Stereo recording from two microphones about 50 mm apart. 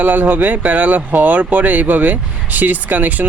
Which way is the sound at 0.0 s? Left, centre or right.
Right.